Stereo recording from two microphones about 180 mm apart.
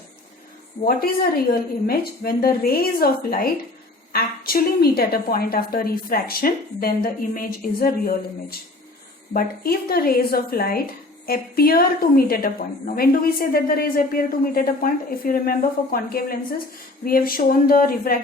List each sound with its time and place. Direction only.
0.9 s a woman's voice: 55° left (ahead or behind)